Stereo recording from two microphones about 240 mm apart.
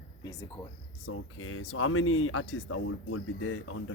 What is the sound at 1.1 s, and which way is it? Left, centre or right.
Speech, left.